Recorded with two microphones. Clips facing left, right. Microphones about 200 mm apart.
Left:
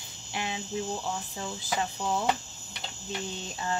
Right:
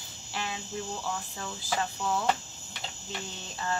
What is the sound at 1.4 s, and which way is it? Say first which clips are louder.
Speech: left 1 dB; 20° left (ahead or behind).